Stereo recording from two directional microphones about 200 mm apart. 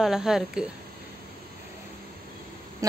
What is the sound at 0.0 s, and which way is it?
Speech, centre (ahead or behind).